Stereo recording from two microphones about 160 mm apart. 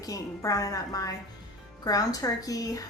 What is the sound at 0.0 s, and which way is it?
A woman's voice, 20° left (ahead or behind).